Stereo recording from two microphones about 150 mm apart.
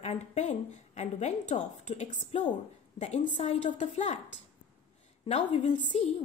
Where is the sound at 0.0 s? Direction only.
45° left (ahead or behind).